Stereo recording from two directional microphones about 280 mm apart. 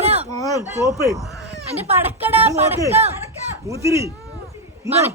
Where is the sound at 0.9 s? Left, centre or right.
Centre.